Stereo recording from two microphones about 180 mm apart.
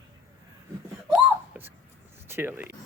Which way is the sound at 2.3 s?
10° right (ahead or behind).